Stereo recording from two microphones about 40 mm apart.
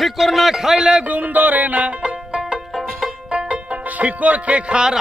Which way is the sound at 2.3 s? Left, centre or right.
Centre.